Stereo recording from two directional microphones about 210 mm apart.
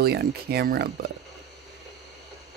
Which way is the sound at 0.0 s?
50° right (ahead or behind).